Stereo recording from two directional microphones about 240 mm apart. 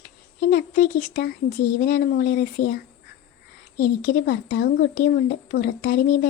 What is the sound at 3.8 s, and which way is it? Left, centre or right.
Speech, left.